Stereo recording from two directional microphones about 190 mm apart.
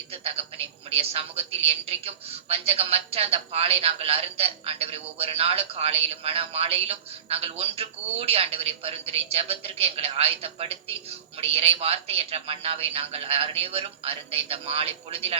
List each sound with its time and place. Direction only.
0.1 s a man's voice: 30° right (ahead or behind)